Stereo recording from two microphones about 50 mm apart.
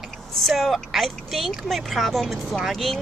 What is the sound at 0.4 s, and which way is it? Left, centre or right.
A woman's voice, centre.